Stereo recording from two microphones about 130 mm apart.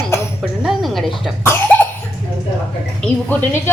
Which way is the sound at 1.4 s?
15° left (ahead or behind).